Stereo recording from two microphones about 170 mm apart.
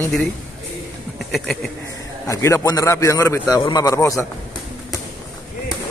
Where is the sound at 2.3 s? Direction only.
15° left (ahead or behind).